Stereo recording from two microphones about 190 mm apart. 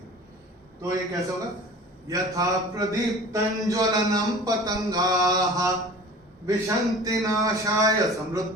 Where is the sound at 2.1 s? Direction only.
20° right (ahead or behind).